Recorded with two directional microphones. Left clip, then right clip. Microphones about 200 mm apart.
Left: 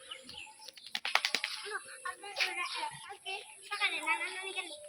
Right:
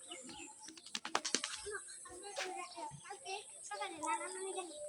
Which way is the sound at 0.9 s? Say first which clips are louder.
Left 7 dB; 45° right (ahead or behind).